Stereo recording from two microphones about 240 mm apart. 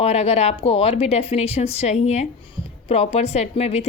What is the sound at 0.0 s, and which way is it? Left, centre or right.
A woman's voice, left.